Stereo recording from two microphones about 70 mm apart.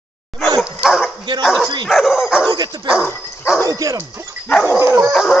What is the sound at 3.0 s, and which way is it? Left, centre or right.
Dog, left.